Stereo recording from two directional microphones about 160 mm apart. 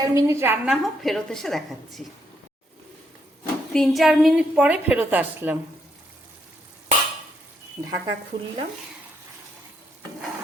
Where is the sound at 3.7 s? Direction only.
Centre (ahead or behind).